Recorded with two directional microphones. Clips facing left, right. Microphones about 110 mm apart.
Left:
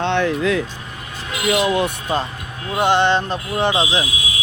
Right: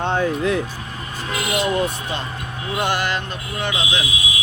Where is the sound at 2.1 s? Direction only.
45° left (ahead or behind).